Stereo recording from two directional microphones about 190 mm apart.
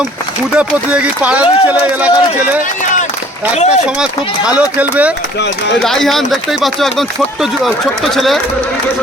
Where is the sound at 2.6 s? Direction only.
40° left (ahead or behind).